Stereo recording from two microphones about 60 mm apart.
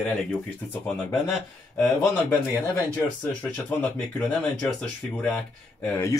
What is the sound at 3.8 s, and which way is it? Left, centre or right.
Speech, left.